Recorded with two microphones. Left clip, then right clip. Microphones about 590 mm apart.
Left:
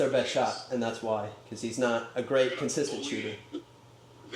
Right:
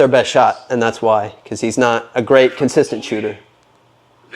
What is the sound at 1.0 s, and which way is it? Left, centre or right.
Speech, right.